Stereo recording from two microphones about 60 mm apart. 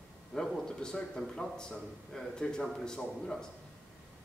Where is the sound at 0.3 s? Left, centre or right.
Centre.